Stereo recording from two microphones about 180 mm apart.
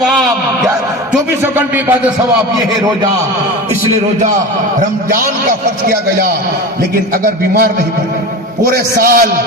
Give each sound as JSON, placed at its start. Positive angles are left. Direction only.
{"t": 1.1, "sound": "speech", "side_deg": -10}
{"t": 8.7, "sound": "a man's voice", "side_deg": -50}